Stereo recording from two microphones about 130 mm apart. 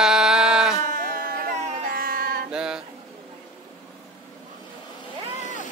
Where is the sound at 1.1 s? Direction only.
90° right.